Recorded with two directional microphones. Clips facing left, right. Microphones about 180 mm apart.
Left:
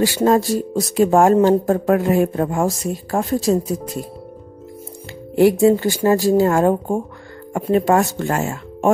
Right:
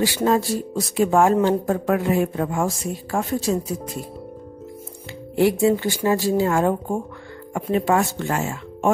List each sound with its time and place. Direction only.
0.0 s speech: 40° left (ahead or behind)
5.3 s speech: 45° left (ahead or behind)